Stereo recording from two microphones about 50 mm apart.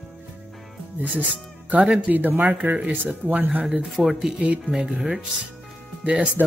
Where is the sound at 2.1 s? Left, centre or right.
Right.